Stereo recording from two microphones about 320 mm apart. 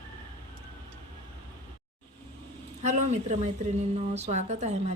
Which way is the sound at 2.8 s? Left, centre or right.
Right.